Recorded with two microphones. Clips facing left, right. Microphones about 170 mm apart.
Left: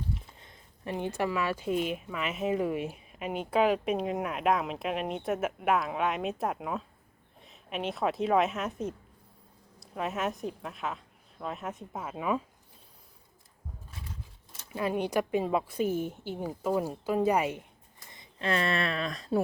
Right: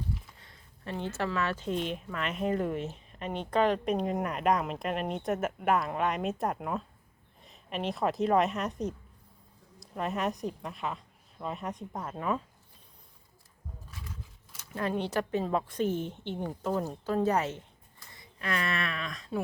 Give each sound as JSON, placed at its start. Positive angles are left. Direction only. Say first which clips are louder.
{"t": 0.3, "sound": "a woman's voice", "louder": "left 2 dB", "side_deg": 20}
{"t": 14.7, "sound": "speech", "louder": "left 2 dB", "side_deg": 10}
{"t": 18.1, "sound": "speech", "louder": "left 4 dB", "side_deg": 25}